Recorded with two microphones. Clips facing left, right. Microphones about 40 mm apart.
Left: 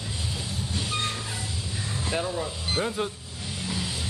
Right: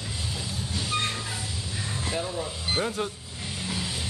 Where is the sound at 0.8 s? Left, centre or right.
Right.